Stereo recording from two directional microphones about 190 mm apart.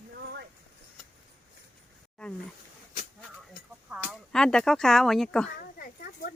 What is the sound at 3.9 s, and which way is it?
Speech, centre (ahead or behind).